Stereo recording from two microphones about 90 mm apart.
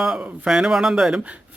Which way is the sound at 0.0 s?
5° right (ahead or behind).